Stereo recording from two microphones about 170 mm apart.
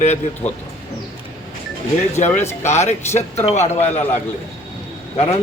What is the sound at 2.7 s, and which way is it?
Speech, 40° left (ahead or behind).